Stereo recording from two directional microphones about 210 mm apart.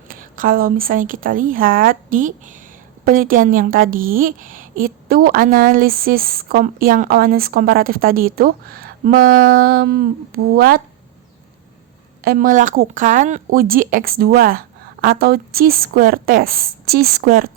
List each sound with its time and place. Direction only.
0.1 s a woman's voice: 40° right (ahead or behind)
12.2 s a woman's voice: 45° right (ahead or behind)